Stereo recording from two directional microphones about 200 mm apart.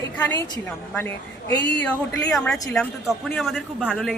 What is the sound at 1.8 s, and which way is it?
Speech, 5° left (ahead or behind).